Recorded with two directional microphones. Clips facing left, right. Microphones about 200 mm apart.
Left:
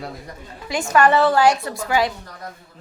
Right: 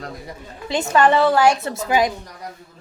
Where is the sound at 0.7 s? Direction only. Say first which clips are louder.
Even; 25° right (ahead or behind).